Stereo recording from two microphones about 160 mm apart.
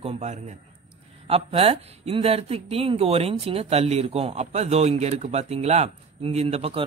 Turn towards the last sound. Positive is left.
turn(degrees=-40)  # may be behind; listen again after turning